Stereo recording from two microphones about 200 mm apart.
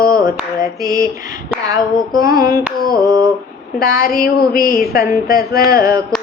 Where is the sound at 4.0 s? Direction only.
50° left (ahead or behind).